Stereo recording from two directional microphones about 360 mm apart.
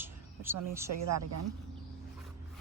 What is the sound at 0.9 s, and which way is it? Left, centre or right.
Speech, right.